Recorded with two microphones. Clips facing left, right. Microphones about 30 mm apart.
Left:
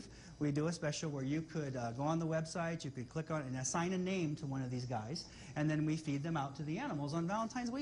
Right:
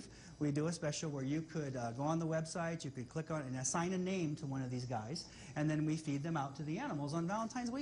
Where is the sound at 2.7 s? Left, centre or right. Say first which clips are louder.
Left 1 dB; centre.